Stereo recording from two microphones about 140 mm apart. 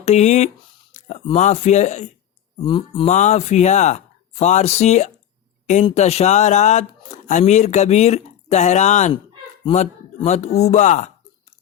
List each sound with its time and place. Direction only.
0.0 s speech: 50° left (ahead or behind)
0.9 s a sound: 60° left (ahead or behind)
1.4 s speech: 55° left (ahead or behind)
2.6 s speech: 35° left (ahead or behind)
3.1 s speech: 55° left (ahead or behind)
9.6 s speech: 45° left (ahead or behind)